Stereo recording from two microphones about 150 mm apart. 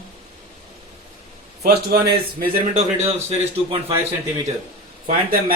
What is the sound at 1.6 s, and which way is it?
Speech, 90° right.